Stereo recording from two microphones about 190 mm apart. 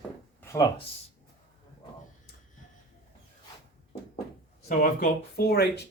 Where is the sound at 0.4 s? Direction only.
15° left (ahead or behind).